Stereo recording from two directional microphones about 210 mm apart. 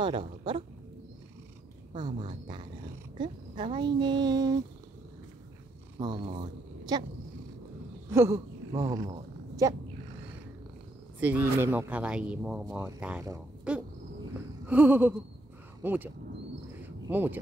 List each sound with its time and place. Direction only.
0.0 s speech: 25° right (ahead or behind)
2.0 s speech: 20° right (ahead or behind)
5.9 s speech: 20° right (ahead or behind)
8.1 s speech: 15° right (ahead or behind)
11.1 s speech: 5° right (ahead or behind)
13.7 s cricket: 5° right (ahead or behind)
14.7 s speech: 10° right (ahead or behind)
16.8 s a sound: 10° right (ahead or behind)